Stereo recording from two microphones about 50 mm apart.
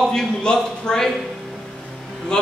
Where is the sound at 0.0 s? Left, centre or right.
Centre.